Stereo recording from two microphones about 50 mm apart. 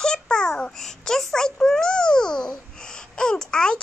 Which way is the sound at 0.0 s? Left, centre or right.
Centre.